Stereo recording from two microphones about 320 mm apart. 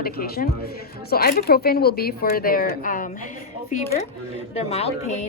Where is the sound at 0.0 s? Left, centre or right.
Left.